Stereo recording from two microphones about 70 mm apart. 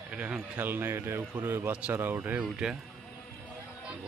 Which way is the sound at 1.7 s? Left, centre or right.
Right.